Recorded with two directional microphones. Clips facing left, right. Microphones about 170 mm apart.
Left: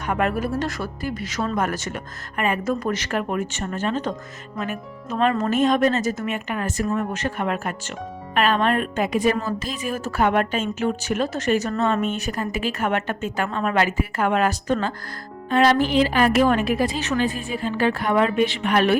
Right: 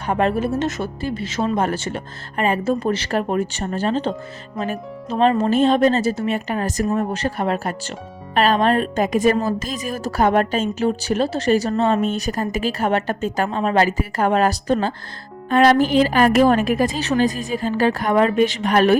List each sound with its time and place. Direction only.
0.1 s a woman's voice: 30° right (ahead or behind)
15.4 s a woman's voice: 50° right (ahead or behind)